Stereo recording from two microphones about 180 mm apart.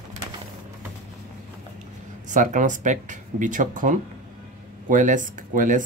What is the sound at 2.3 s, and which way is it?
Speech, 45° right (ahead or behind).